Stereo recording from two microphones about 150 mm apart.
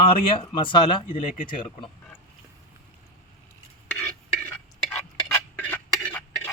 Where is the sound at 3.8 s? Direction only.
10° left (ahead or behind).